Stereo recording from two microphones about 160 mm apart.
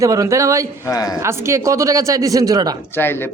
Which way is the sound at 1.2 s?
15° right (ahead or behind).